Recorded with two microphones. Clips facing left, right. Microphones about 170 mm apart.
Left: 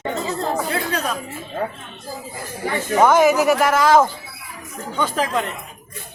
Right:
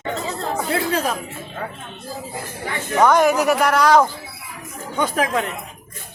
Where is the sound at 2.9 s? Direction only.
5° left (ahead or behind).